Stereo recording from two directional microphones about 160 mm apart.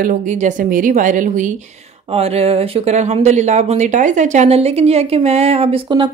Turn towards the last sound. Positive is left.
turn(degrees=-35)  # may be behind; listen again after turning